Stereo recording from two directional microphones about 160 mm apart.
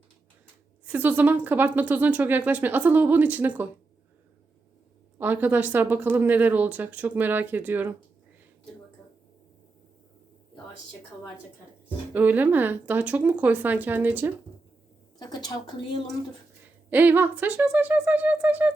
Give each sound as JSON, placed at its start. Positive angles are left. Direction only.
{"t": 0.9, "sound": "speech", "side_deg": -10}
{"t": 5.1, "sound": "speech", "side_deg": -10}
{"t": 12.1, "sound": "speech", "side_deg": -10}
{"t": 15.2, "sound": "a woman's voice", "side_deg": 25}
{"t": 16.9, "sound": "speech", "side_deg": -10}